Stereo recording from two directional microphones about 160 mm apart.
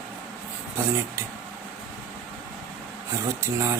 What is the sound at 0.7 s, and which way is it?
Speech, 15° right (ahead or behind).